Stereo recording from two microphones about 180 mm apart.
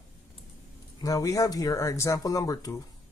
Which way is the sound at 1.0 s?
20° left (ahead or behind).